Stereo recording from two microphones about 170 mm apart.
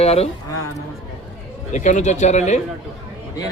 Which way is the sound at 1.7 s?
45° left (ahead or behind).